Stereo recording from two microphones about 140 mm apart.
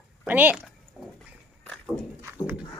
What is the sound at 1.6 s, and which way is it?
Walk, 5° left (ahead or behind).